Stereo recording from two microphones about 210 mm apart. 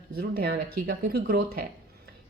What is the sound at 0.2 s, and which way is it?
Speech, 45° right (ahead or behind).